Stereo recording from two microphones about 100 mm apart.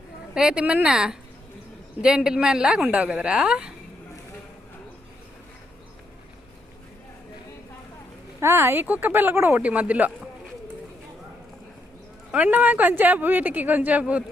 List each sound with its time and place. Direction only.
0.3 s speech: 10° right (ahead or behind)
8.4 s speech: 25° right (ahead or behind)
12.3 s speech: 15° right (ahead or behind)